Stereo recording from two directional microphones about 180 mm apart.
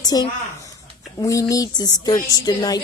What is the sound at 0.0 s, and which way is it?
A woman's voice, 20° left (ahead or behind).